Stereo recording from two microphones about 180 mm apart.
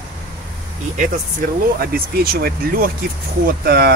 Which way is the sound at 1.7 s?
55° right (ahead or behind).